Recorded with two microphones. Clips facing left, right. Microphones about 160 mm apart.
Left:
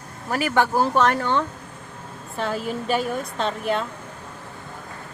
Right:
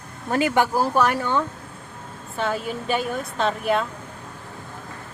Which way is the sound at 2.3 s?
Centre (ahead or behind).